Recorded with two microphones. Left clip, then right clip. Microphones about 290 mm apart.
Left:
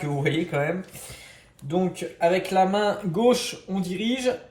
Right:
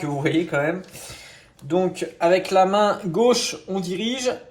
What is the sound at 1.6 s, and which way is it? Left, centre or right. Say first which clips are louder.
Speech: right 5 dB; right.